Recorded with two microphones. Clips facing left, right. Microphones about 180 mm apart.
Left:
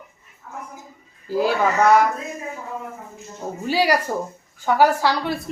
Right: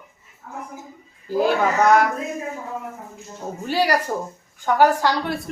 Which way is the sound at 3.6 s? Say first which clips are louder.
Left 1 dB; 10° left (ahead or behind).